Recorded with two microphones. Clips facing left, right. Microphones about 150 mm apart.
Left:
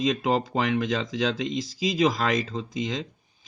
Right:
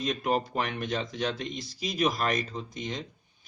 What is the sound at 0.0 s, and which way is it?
A man's voice, 90° left.